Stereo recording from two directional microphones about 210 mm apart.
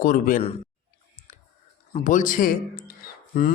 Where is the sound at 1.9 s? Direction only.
35° left (ahead or behind).